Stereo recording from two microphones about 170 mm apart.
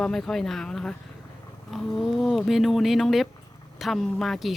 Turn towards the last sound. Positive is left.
turn(degrees=0)  # may be behind; listen again after turning